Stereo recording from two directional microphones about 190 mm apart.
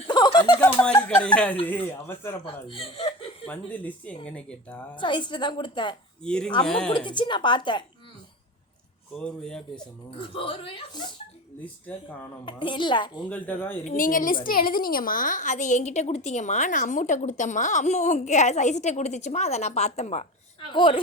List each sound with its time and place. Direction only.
0.1 s a sound: 20° left (ahead or behind)
1.0 s speech: 5° left (ahead or behind)
2.6 s speech: 25° left (ahead or behind)
3.4 s speech: 10° left (ahead or behind)
4.9 s a woman's voice: 25° left (ahead or behind)
6.2 s speech: 5° left (ahead or behind)
6.9 s a woman's voice: 25° left (ahead or behind)
9.1 s speech: 5° left (ahead or behind)
10.2 s a woman's voice: 30° left (ahead or behind)
11.9 s speech: 5° left (ahead or behind)
12.5 s a woman's voice: 25° left (ahead or behind)
13.3 s speech: 10° left (ahead or behind)
13.8 s a woman's voice: 45° left (ahead or behind); by 21.0 s 25° left (ahead or behind)